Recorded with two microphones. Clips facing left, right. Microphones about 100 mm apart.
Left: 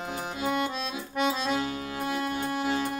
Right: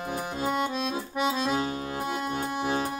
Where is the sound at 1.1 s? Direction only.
5° right (ahead or behind).